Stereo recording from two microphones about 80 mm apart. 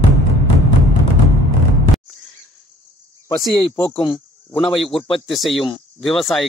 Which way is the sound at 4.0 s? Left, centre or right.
Left.